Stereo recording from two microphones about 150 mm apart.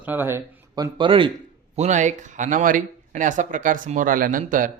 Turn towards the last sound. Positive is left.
turn(degrees=-65)  # may be behind; listen again after turning